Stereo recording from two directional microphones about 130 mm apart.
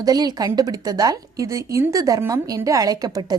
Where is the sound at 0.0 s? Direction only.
30° right (ahead or behind).